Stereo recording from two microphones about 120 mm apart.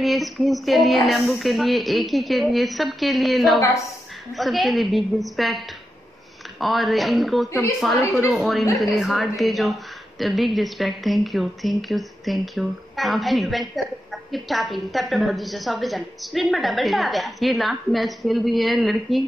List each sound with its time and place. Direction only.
0.0 s a woman's voice: centre (ahead or behind)
6.6 s a woman's voice: centre (ahead or behind)
7.4 s a woman's voice: 25° left (ahead or behind)
8.3 s a woman's voice: centre (ahead or behind)